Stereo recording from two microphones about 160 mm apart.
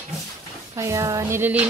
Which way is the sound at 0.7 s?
20° right (ahead or behind).